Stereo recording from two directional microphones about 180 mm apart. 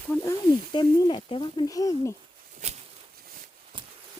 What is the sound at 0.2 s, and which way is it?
Speech, 25° left (ahead or behind).